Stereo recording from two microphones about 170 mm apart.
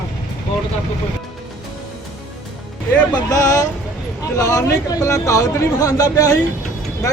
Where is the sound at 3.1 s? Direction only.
20° left (ahead or behind).